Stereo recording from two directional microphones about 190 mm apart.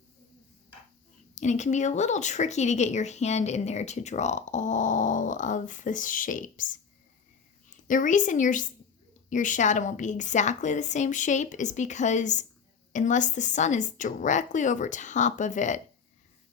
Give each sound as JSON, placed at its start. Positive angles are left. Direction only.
{"t": 1.4, "sound": "speech", "side_deg": 40}